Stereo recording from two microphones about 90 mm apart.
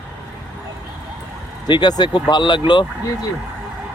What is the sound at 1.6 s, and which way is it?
Speech, 55° left (ahead or behind).